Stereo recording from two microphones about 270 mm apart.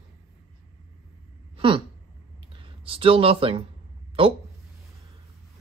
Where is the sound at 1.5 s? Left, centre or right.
Centre.